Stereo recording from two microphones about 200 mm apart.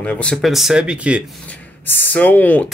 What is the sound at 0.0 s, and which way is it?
Speech, 5° left (ahead or behind).